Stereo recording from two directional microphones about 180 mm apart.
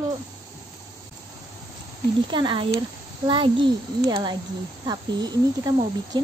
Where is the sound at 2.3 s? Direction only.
25° right (ahead or behind).